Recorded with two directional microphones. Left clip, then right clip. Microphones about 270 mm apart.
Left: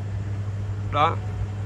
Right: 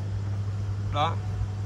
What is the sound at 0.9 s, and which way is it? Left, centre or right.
Speech, centre.